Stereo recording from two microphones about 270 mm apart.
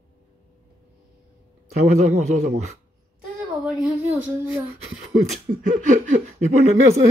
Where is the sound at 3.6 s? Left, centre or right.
Centre.